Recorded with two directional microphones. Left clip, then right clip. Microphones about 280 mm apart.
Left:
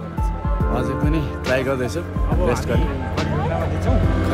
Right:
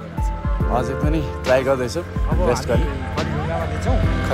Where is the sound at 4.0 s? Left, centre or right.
Left.